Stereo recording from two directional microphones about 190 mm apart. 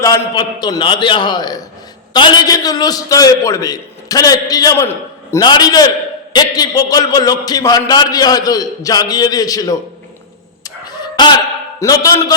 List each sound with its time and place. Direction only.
0.0 s a man's voice: 20° left (ahead or behind)
10.6 s chicken: 20° left (ahead or behind)
11.8 s a man's voice: 20° left (ahead or behind)